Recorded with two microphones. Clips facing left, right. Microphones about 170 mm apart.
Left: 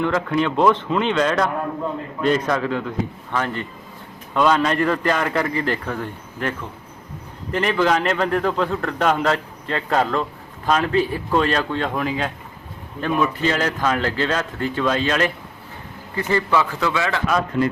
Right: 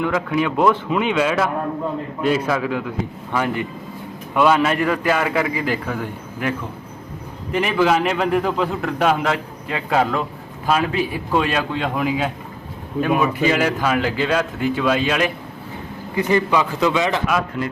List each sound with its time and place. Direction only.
0.0 s a man's voice: 5° right (ahead or behind)
7.5 s a man's voice: 5° right (ahead or behind)
17.2 s a man's voice: 5° right (ahead or behind)